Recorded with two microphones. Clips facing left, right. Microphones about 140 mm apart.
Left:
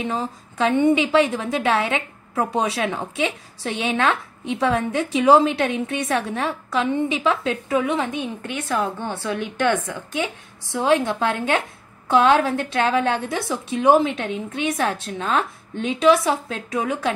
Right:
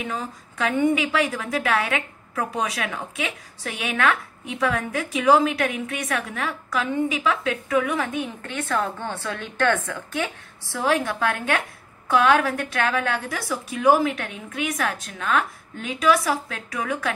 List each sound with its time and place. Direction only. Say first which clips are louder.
0.0 s a woman's voice: left 4 dB; 30° left (ahead or behind)